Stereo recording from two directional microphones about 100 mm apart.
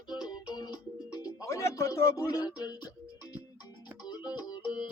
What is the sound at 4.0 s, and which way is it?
Music, 45° left (ahead or behind).